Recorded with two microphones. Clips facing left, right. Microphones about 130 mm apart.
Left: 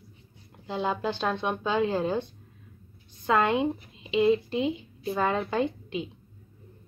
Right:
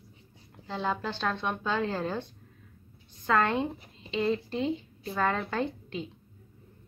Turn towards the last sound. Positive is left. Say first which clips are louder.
# left 4 dB
turn(degrees=15)  # may be behind; listen again after turning